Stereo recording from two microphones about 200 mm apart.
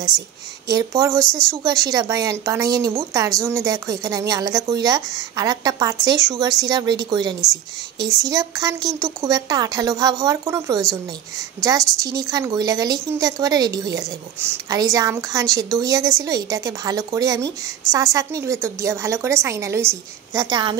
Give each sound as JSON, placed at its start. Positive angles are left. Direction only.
{"t": 0.7, "sound": "a woman's voice", "side_deg": -15}